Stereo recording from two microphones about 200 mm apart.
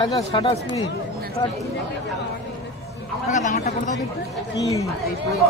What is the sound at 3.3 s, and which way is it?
Speech, 40° left (ahead or behind).